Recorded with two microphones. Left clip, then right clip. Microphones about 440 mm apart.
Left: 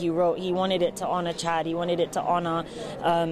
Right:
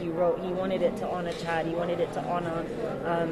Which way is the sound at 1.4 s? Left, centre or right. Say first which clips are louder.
Left 1 dB; left.